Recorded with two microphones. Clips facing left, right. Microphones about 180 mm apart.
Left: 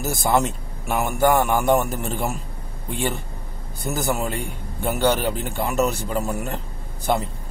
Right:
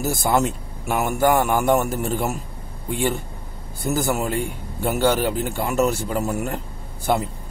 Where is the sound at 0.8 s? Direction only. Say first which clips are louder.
Right 1 dB; 15° right (ahead or behind).